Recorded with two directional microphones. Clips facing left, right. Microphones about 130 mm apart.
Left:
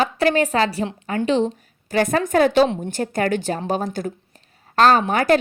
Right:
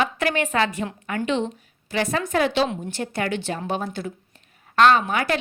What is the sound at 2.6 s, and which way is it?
Speech, 30° left (ahead or behind).